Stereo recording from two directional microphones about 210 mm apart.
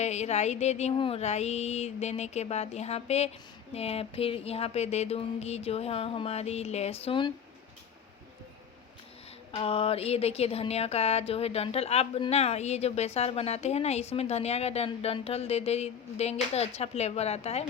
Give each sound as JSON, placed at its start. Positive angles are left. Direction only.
{"t": 0.0, "sound": "a sound", "side_deg": 30}
{"t": 3.8, "sound": "speech", "side_deg": 30}
{"t": 9.6, "sound": "speech", "side_deg": 25}